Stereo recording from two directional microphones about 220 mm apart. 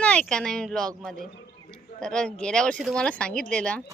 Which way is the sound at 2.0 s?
5° left (ahead or behind).